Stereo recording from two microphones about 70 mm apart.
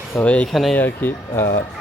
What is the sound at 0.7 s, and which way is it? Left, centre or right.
Speech, left.